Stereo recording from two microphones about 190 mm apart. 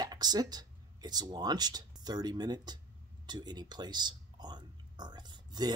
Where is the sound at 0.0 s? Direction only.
20° right (ahead or behind).